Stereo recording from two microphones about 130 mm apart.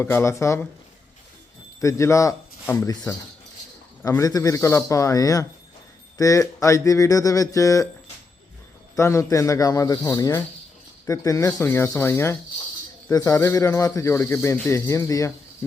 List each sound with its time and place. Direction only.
0.0 s speech: 20° left (ahead or behind)
1.8 s speech: 25° left (ahead or behind)
4.2 s speech: 25° left (ahead or behind)
9.0 s speech: 25° left (ahead or behind)